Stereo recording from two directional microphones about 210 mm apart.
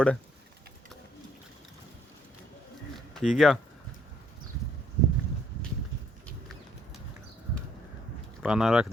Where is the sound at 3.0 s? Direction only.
Centre (ahead or behind).